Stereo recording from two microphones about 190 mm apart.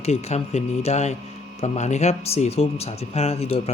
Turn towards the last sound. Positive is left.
turn(degrees=30)  # may be behind; listen again after turning